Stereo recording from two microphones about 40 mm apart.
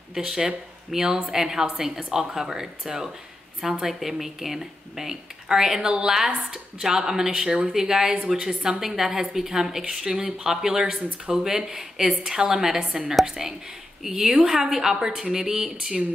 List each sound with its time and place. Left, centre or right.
0.1 s a woman's voice: centre